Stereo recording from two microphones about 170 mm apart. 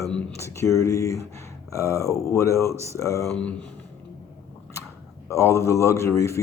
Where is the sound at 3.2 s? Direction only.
5° left (ahead or behind).